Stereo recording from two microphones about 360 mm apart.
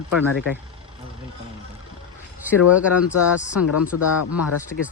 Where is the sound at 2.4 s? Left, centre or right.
Centre.